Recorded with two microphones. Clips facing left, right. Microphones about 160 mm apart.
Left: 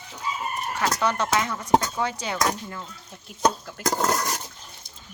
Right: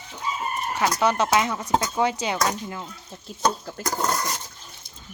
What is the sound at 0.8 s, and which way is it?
Speech, 10° right (ahead or behind).